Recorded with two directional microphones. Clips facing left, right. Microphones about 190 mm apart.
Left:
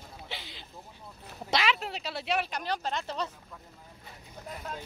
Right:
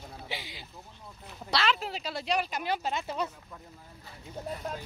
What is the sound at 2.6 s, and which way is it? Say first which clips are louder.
Speech: right 1 dB; 10° right (ahead or behind).